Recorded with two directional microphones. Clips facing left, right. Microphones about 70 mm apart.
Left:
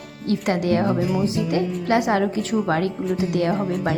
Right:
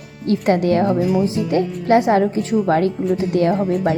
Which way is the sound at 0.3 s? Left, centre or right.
Right.